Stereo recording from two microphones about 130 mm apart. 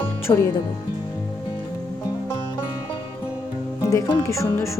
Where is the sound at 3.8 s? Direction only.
20° left (ahead or behind).